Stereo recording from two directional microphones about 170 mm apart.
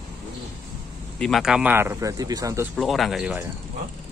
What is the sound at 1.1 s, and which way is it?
Speech, centre (ahead or behind).